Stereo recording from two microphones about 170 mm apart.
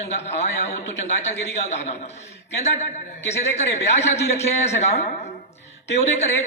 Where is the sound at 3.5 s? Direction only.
40° left (ahead or behind).